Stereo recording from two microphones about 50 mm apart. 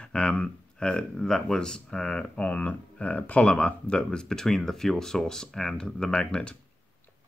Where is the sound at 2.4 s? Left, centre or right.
Left.